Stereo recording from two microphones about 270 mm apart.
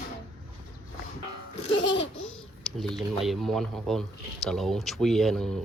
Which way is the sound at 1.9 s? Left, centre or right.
Left.